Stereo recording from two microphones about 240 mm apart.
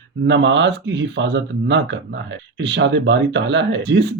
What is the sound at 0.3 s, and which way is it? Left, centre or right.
Speech, right.